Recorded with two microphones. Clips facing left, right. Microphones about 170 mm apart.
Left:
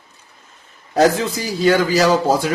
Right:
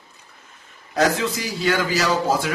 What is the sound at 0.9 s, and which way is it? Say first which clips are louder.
A man's voice: left 5 dB; 35° left (ahead or behind).